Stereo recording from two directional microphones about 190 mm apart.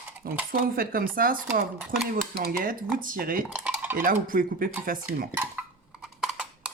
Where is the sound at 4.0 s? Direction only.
45° right (ahead or behind).